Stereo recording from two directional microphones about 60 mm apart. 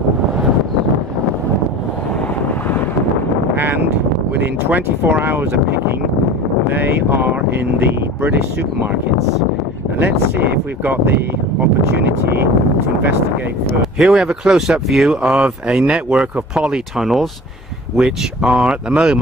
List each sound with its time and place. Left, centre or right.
3.5 s a sound: right
4.4 s speech: right
6.7 s speech: right
10.8 s speech: right
13.9 s speech: centre
15.3 s speech: centre
17.9 s speech: centre